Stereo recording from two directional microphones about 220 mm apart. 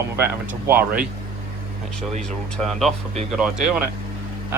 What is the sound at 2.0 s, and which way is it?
Speech, centre (ahead or behind).